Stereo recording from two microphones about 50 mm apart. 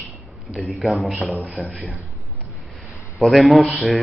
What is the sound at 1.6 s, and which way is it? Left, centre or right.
Speech, right.